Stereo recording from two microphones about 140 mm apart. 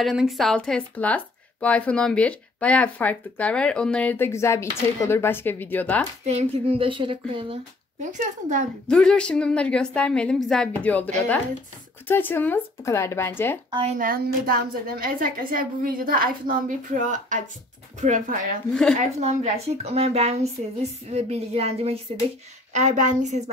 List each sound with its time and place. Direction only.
0.0 s speech: centre (ahead or behind)
6.2 s speech: 45° right (ahead or behind)
8.0 s a woman's voice: 60° right (ahead or behind)
8.8 s speech: 5° left (ahead or behind)
13.9 s a woman's voice: 85° right; by 18.6 s 65° right (ahead or behind)
18.9 s a woman's voice: 50° right (ahead or behind)
22.7 s a woman's voice: 60° right (ahead or behind)